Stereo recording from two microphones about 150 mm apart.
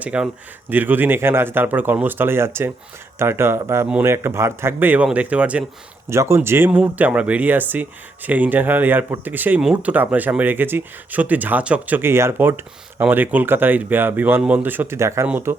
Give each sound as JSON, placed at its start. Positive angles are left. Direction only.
{"t": 0.0, "sound": "speech", "side_deg": -10}